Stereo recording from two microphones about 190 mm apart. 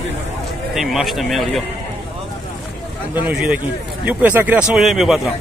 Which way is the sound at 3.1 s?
5° right (ahead or behind).